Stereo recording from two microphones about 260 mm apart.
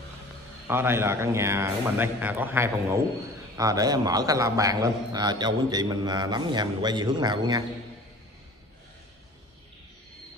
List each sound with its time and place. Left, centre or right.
0.7 s a man's voice: centre